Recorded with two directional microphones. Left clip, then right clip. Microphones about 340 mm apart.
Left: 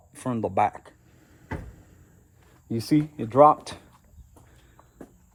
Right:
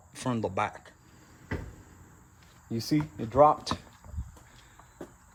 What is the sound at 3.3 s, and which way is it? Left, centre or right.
Speech, left.